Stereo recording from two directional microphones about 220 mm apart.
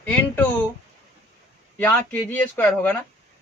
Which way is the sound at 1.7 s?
10° left (ahead or behind).